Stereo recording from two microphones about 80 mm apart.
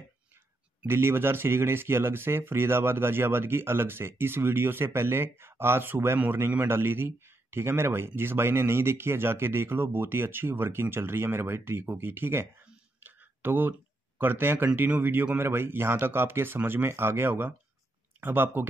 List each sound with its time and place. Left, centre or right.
0.8 s speech: right